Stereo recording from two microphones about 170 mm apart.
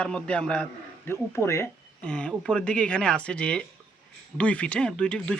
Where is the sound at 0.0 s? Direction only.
5° left (ahead or behind).